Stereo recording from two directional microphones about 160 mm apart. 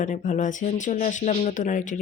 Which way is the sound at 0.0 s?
50° left (ahead or behind).